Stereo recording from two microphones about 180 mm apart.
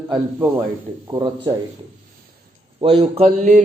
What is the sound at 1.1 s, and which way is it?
Speech, 25° right (ahead or behind).